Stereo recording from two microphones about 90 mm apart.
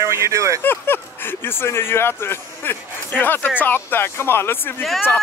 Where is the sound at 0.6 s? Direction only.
25° left (ahead or behind).